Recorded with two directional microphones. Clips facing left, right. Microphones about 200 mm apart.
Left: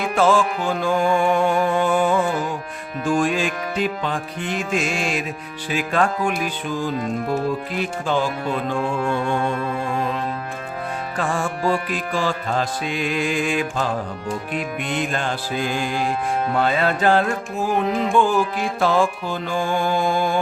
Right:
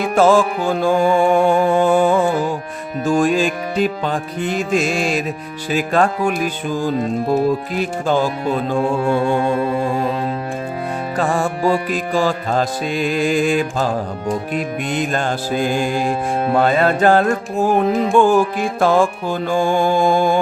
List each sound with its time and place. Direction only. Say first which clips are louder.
0.1 s music: right 5 dB; 40° right (ahead or behind)
11.2 s music: right 5 dB; 40° right (ahead or behind)